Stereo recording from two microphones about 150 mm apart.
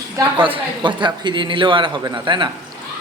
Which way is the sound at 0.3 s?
35° right (ahead or behind).